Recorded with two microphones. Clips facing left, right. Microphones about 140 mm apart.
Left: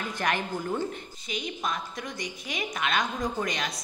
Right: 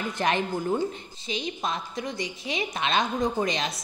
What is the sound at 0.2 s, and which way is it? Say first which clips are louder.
A woman's voice: right 4 dB; 20° right (ahead or behind).